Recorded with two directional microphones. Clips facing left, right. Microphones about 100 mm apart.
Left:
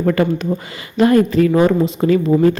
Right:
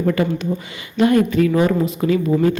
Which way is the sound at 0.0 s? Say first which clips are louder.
Left 3 dB; 50° left (ahead or behind).